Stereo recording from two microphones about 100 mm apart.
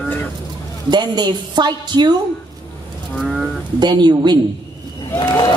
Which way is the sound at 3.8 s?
45° right (ahead or behind).